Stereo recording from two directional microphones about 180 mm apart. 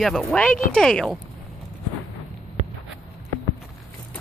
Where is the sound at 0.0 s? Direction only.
5° left (ahead or behind).